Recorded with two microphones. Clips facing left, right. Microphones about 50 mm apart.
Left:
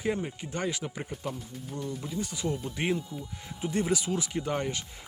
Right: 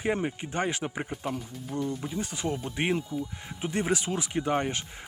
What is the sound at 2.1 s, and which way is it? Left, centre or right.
Speech, right.